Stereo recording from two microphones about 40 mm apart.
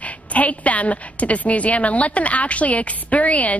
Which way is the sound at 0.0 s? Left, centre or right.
Left.